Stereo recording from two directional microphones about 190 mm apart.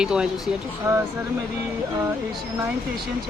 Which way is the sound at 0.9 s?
15° right (ahead or behind).